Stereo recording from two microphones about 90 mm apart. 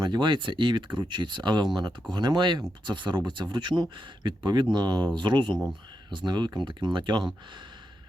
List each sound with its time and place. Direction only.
0.0 s speech: 55° right (ahead or behind)